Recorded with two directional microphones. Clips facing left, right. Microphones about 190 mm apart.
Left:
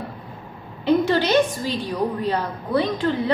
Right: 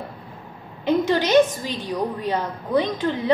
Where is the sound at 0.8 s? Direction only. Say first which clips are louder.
Left 1 dB; 15° right (ahead or behind).